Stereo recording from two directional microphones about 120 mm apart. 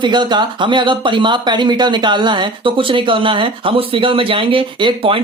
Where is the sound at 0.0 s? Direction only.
40° right (ahead or behind).